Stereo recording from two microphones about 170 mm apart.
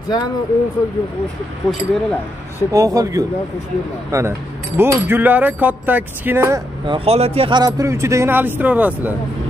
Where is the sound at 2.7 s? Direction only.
20° right (ahead or behind).